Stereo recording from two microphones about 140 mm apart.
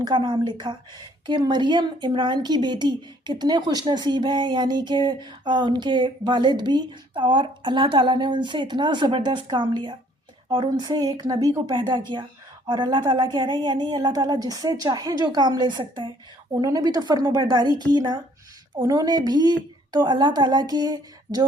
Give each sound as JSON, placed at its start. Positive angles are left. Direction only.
{"t": 0.0, "sound": "a woman's voice", "side_deg": -30}